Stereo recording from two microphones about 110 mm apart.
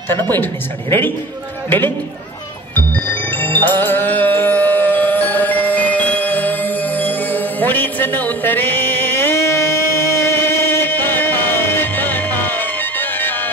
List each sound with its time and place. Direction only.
0.1 s a woman's voice: 20° left (ahead or behind)
3.6 s music: 15° left (ahead or behind)